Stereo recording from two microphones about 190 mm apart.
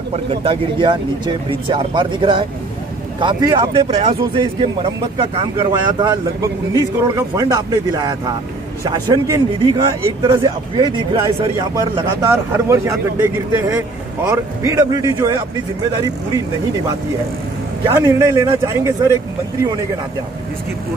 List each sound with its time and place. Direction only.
0.1 s a man's voice: 30° right (ahead or behind)
17.8 s a man's voice: 20° right (ahead or behind)